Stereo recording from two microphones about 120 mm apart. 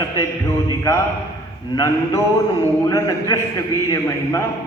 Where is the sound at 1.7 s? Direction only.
25° left (ahead or behind).